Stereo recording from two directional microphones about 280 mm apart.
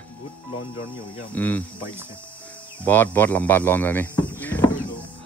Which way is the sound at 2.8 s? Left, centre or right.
Centre.